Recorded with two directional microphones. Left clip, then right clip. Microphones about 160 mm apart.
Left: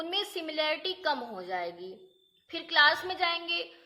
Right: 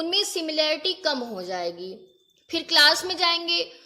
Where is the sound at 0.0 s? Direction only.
40° right (ahead or behind).